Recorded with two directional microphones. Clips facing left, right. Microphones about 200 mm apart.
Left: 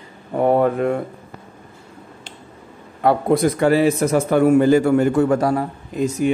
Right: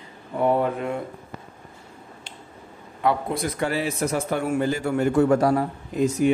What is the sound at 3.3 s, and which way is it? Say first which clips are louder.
A man's voice: left 10 dB; 70° left (ahead or behind).